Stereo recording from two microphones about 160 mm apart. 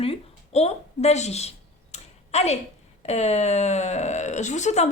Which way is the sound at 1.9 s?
45° left (ahead or behind).